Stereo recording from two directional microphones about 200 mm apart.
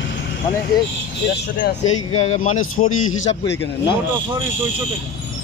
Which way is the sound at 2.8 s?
90° left.